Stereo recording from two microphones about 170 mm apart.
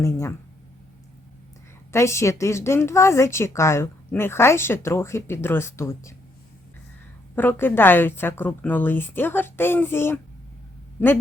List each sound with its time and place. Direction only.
0.0 s a woman's voice: 15° left (ahead or behind)
1.9 s a woman's voice: 15° left (ahead or behind)
7.3 s a woman's voice: 10° left (ahead or behind)